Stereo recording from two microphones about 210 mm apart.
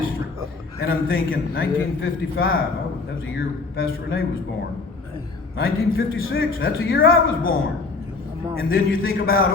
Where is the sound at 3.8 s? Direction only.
70° left (ahead or behind).